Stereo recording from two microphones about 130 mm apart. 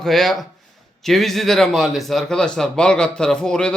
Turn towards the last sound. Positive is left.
turn(degrees=5)  # may be behind; listen again after turning